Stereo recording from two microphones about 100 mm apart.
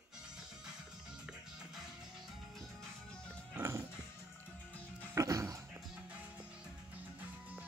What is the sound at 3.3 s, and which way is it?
Music, 25° right (ahead or behind).